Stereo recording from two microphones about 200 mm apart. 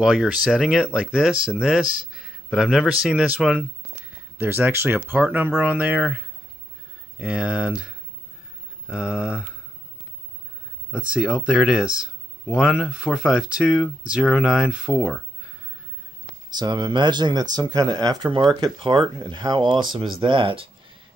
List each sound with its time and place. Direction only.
0.0 s a man's voice: 5° right (ahead or behind)
10.9 s speech: 5° right (ahead or behind)
16.4 s speech: 20° right (ahead or behind)